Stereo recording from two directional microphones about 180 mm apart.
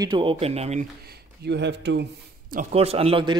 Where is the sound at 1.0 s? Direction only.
70° right (ahead or behind).